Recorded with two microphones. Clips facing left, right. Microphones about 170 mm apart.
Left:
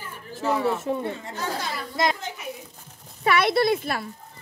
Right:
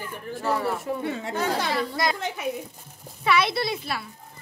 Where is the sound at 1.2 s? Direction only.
70° right (ahead or behind).